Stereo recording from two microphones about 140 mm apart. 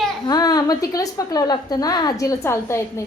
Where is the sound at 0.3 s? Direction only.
25° left (ahead or behind).